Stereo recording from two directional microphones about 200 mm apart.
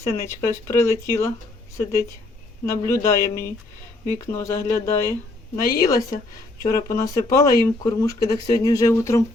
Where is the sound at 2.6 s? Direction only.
15° left (ahead or behind).